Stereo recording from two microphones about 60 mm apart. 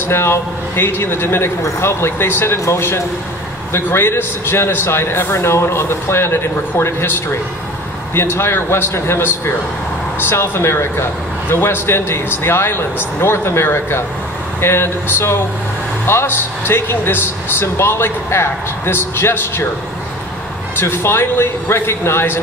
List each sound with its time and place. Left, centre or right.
0.0 s speech: left
20.7 s speech: left